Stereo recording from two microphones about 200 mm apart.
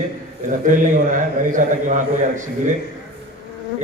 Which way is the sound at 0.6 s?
40° right (ahead or behind).